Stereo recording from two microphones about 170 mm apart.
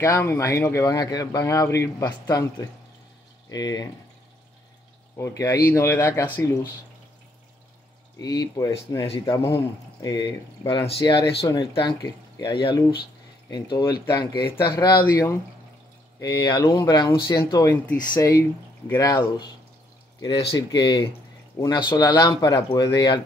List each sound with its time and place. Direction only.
0.0 s speech: 15° left (ahead or behind)
5.1 s speech: 20° left (ahead or behind)
8.2 s speech: 25° left (ahead or behind)
18.9 s speech: 20° left (ahead or behind)